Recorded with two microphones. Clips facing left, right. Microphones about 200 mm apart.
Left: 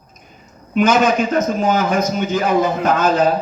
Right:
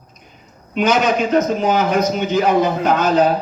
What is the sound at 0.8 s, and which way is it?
A man's voice, 50° left (ahead or behind).